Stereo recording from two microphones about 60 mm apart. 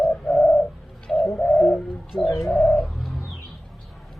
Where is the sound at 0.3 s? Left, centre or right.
Centre.